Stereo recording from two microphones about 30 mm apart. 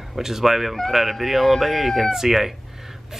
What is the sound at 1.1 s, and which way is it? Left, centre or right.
Speech, centre.